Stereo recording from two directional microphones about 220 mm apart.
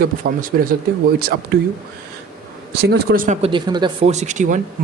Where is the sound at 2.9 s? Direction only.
40° right (ahead or behind).